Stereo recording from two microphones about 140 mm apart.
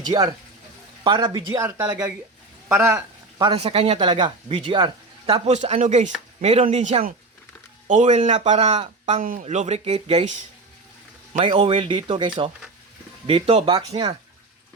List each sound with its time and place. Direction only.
0.0 s speech: 30° right (ahead or behind)
3.5 s speech: 45° right (ahead or behind)
6.4 s speech: 45° right (ahead or behind)
9.1 s speech: 75° right (ahead or behind)
9.5 s speech: 50° right (ahead or behind)
11.3 s a man's voice: 40° right (ahead or behind)